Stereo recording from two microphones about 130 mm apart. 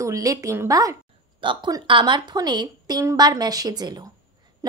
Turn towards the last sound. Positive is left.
turn(degrees=-30)  # may be behind; listen again after turning